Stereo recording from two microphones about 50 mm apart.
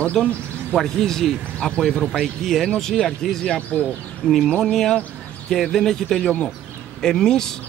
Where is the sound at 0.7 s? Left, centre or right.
Centre.